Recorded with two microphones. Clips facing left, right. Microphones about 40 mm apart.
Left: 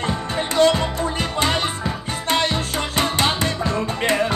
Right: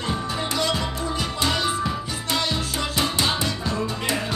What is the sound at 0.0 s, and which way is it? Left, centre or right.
Music, left.